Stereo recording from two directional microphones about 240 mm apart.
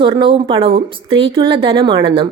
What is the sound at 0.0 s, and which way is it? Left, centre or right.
A woman's voice, right.